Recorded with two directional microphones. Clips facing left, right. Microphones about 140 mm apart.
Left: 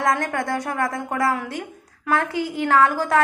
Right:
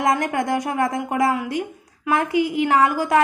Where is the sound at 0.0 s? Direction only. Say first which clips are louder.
Right 2 dB; 15° right (ahead or behind).